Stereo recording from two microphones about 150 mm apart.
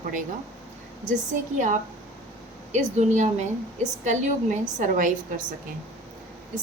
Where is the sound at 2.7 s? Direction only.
50° right (ahead or behind).